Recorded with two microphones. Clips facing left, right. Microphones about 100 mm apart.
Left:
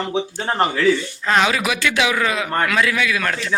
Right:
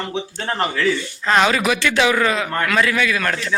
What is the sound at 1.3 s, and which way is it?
A man's voice, 5° left (ahead or behind).